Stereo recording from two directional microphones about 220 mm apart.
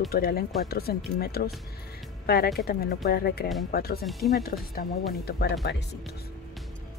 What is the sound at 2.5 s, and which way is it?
Speech, 45° left (ahead or behind).